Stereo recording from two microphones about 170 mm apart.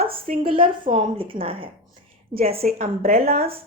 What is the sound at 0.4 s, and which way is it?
A woman's voice, 30° right (ahead or behind).